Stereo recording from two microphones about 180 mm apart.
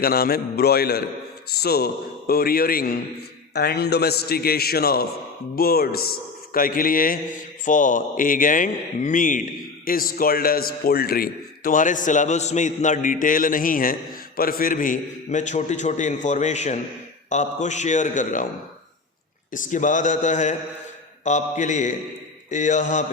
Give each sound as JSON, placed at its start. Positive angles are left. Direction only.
{"t": 0.0, "sound": "a man's voice", "side_deg": 60}
{"t": 19.5, "sound": "a man's voice", "side_deg": 45}